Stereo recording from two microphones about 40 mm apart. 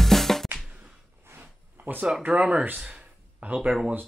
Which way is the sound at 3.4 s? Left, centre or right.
Right.